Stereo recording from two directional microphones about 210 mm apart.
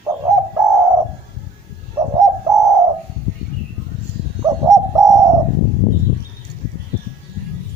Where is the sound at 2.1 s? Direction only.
15° right (ahead or behind).